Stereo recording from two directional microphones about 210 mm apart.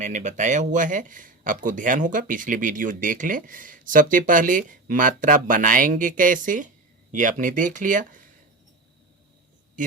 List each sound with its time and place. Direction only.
0.0 s speech: 35° right (ahead or behind)